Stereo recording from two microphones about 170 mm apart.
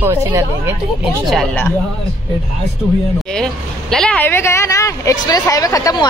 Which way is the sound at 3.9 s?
5° left (ahead or behind).